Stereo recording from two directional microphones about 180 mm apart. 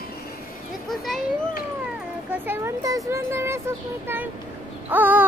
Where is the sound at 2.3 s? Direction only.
10° right (ahead or behind).